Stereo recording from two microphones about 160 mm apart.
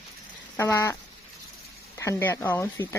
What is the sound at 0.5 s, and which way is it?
Speech, 20° left (ahead or behind).